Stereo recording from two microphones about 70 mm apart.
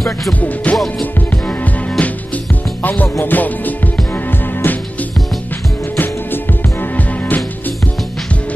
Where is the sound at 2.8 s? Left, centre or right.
Left.